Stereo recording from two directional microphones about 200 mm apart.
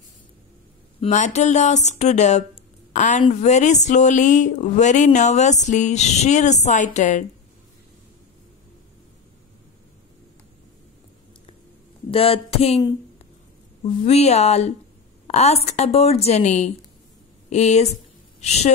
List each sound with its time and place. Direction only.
1.0 s speech: 35° left (ahead or behind)
12.1 s a sound: 30° left (ahead or behind)
13.8 s a woman's voice: 30° left (ahead or behind)